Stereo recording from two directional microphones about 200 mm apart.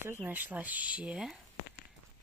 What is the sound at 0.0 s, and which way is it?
Speech, 10° right (ahead or behind).